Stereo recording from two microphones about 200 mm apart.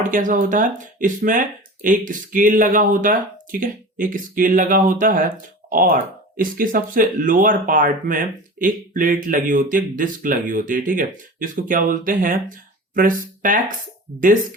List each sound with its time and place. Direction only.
0.0 s speech: 40° right (ahead or behind)